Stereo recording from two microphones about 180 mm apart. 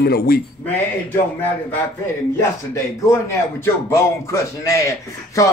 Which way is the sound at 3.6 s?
15° left (ahead or behind).